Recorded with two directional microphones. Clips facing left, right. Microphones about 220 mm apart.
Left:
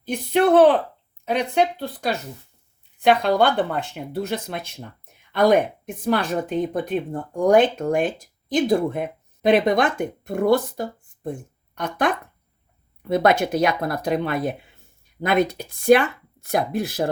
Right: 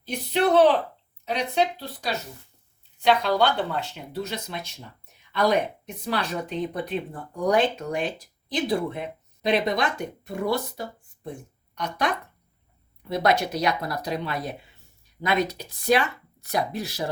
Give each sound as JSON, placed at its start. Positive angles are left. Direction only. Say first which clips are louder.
{"t": 0.0, "sound": "speech", "louder": "left 4 dB", "side_deg": 50}